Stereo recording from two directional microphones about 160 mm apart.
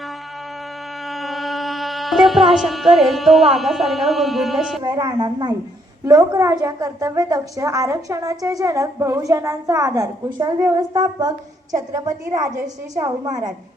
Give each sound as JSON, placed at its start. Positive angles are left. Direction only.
{"t": 1.1, "sound": "music", "side_deg": 0}
{"t": 4.8, "sound": "a woman's voice", "side_deg": -25}